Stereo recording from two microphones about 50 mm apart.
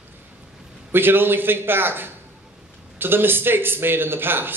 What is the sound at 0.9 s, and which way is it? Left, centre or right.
Speech, right.